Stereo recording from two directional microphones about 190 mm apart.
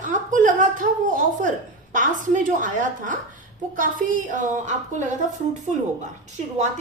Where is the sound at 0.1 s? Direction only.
45° right (ahead or behind).